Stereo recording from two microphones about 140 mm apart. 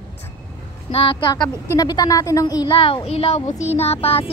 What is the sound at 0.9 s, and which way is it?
Speech, 40° left (ahead or behind).